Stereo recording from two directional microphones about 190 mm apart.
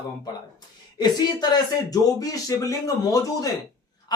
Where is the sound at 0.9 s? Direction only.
20° left (ahead or behind).